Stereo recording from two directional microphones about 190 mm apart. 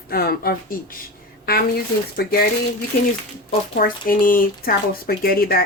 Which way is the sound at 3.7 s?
50° left (ahead or behind).